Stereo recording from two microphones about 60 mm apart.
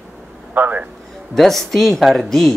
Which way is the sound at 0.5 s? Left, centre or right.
Right.